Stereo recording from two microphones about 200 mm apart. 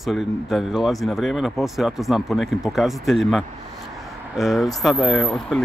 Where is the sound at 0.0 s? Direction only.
Centre (ahead or behind).